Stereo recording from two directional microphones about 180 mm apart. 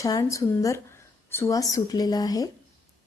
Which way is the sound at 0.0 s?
20° left (ahead or behind).